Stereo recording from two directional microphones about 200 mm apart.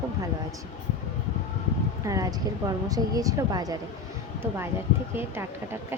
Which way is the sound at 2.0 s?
15° right (ahead or behind).